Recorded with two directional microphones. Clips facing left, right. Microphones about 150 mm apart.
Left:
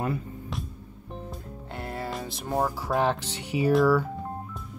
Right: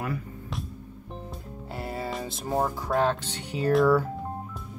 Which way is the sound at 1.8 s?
Centre (ahead or behind).